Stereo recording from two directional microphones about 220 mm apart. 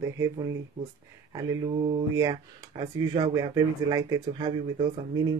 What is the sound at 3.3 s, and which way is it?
Speech, 15° right (ahead or behind).